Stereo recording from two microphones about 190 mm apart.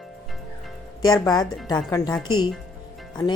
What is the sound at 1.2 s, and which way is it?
Speech, 20° left (ahead or behind).